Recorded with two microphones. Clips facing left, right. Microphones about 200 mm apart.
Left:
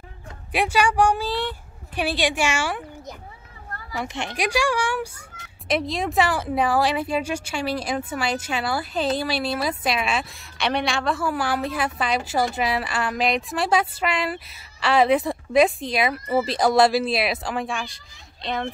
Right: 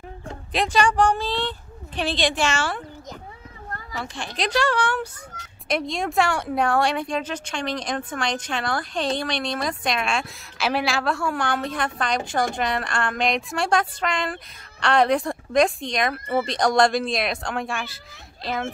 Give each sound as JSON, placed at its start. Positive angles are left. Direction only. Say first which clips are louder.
{"t": 0.5, "sound": "speech", "louder": "even", "side_deg": 10}
{"t": 3.9, "sound": "a woman's voice", "louder": "left 4 dB", "side_deg": 20}
{"t": 4.4, "sound": "speech", "louder": "right 1 dB", "side_deg": 10}